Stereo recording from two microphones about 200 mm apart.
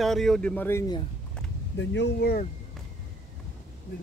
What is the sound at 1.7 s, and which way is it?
Speech, 65° left (ahead or behind).